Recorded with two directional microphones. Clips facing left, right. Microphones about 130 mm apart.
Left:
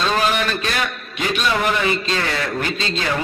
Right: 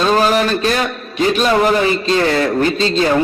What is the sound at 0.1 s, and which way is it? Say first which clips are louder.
A man's voice: right 6 dB; 35° right (ahead or behind).